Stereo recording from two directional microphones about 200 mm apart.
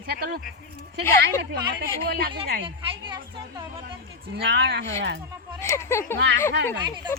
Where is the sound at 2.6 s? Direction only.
25° right (ahead or behind).